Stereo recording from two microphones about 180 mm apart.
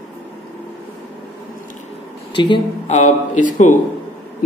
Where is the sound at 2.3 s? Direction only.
25° left (ahead or behind).